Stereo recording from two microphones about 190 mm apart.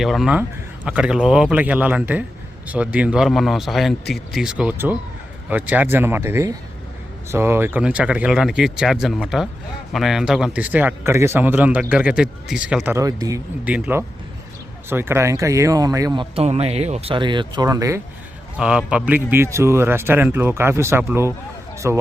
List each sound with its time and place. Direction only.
0.0 s speech: centre (ahead or behind); by 13.4 s 20° right (ahead or behind)
13.7 s speech: 10° right (ahead or behind)
16.3 s speech: 35° right (ahead or behind); by 18.0 s 15° right (ahead or behind)
18.5 s speech: 5° right (ahead or behind)